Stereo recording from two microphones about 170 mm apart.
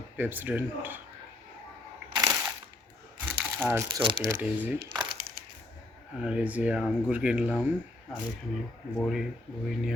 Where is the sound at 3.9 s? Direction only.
25° right (ahead or behind).